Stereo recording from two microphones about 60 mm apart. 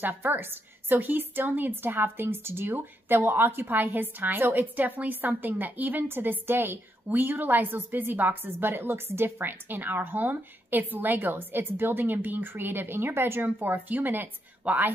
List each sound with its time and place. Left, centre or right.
0.0 s a woman's voice: right